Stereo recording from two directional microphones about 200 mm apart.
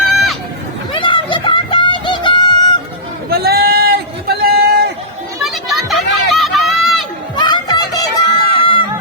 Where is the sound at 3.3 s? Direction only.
50° right (ahead or behind).